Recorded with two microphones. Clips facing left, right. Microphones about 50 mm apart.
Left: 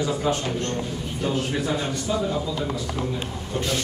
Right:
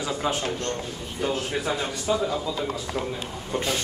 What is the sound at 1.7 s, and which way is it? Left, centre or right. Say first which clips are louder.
Speech: even; centre.